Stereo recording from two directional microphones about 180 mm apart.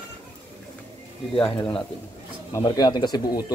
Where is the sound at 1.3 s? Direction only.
25° left (ahead or behind).